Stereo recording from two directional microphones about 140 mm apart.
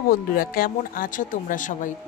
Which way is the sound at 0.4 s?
90° left.